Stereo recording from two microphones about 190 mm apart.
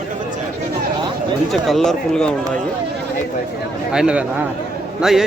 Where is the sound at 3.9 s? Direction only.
5° right (ahead or behind).